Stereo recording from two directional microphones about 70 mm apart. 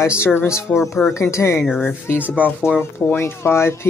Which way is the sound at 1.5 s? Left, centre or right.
Centre.